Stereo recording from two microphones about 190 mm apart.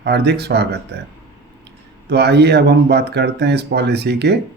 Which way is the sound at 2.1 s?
60° right (ahead or behind).